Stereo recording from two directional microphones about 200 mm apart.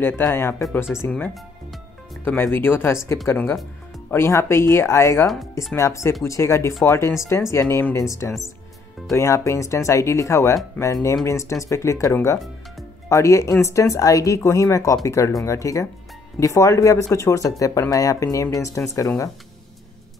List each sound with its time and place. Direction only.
0.0 s speech: 10° left (ahead or behind)